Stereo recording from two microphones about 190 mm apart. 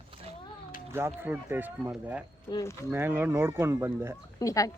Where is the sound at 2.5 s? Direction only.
20° left (ahead or behind).